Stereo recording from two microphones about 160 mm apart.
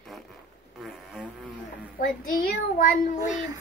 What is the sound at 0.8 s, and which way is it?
Music, 5° right (ahead or behind).